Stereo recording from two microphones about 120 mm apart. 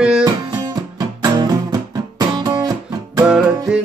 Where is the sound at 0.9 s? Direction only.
35° right (ahead or behind).